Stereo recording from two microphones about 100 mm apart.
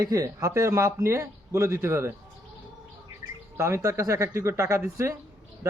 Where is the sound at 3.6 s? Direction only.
30° right (ahead or behind).